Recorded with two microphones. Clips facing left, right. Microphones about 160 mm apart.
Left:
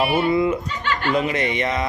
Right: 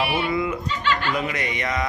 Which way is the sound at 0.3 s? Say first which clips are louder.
Left 5 dB; 25° left (ahead or behind).